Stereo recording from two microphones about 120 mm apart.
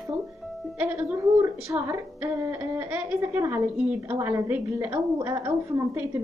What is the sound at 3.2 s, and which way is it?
Speech, 20° right (ahead or behind).